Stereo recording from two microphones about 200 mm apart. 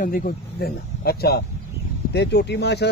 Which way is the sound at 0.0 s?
45° left (ahead or behind).